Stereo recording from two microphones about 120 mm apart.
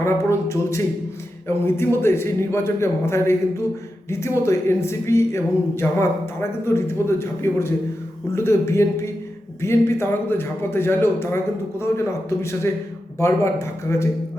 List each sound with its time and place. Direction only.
0.0 s speech: 25° left (ahead or behind)
4.4 s speech: 20° left (ahead or behind)